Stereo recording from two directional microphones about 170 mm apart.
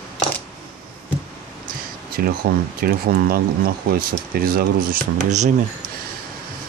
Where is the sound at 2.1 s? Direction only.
60° right (ahead or behind).